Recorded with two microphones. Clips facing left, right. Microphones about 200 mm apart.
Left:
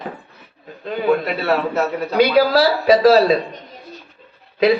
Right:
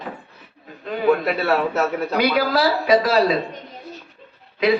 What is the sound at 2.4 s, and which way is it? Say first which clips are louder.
Speech: left 5 dB; 30° left (ahead or behind).